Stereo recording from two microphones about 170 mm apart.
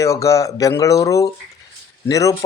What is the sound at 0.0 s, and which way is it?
Speech, 20° left (ahead or behind).